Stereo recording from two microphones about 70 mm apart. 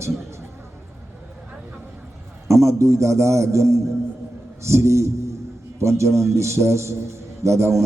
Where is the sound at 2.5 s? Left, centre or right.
Right.